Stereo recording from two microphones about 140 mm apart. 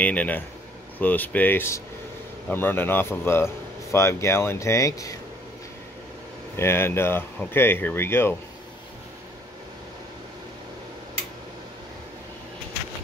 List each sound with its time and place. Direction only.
0.0 s speech: 10° left (ahead or behind)
6.5 s speech: 15° left (ahead or behind)